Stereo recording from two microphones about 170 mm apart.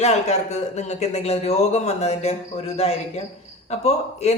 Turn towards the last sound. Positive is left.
turn(degrees=40)  # may be behind; listen again after turning